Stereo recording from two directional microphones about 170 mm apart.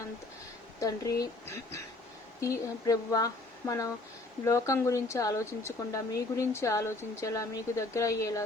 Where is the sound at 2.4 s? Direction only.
20° left (ahead or behind).